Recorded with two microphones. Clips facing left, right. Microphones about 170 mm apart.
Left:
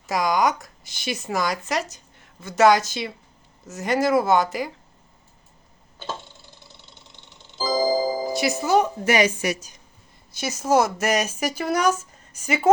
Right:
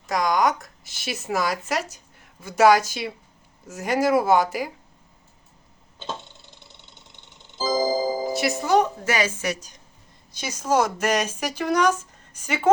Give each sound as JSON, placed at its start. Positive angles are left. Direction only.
{"t": 0.1, "sound": "speech", "side_deg": 0}
{"t": 7.5, "sound": "music", "side_deg": -20}
{"t": 8.3, "sound": "speech", "side_deg": 0}
{"t": 9.0, "sound": "speech", "side_deg": 20}